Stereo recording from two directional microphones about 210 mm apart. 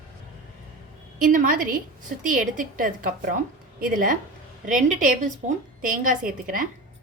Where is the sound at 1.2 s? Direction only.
40° right (ahead or behind).